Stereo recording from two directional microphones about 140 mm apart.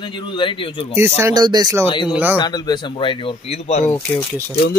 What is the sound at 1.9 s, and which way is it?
Speech, 35° left (ahead or behind).